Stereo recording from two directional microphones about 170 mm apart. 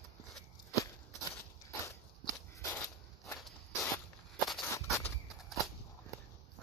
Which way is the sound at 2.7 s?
15° left (ahead or behind).